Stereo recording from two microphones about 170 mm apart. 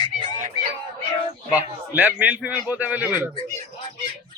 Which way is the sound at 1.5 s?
10° right (ahead or behind).